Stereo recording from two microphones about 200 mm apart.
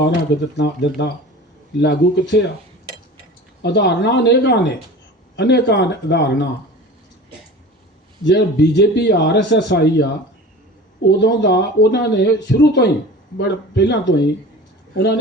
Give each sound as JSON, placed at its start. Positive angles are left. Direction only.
{"t": 0.5, "sound": "speech", "side_deg": 60}
{"t": 3.6, "sound": "speech", "side_deg": 60}
{"t": 8.2, "sound": "speech", "side_deg": 60}
{"t": 11.1, "sound": "speech", "side_deg": 60}